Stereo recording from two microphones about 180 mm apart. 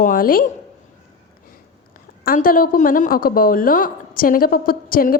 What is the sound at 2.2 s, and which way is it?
A woman's voice, 50° left (ahead or behind).